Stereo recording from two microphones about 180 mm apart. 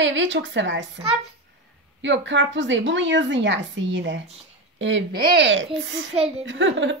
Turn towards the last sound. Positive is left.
turn(degrees=-90)